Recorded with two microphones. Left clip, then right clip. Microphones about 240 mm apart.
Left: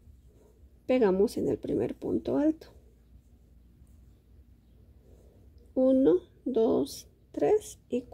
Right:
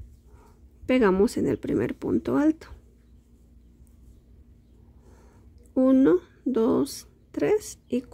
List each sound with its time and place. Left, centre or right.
0.8 s speech: centre
5.8 s speech: centre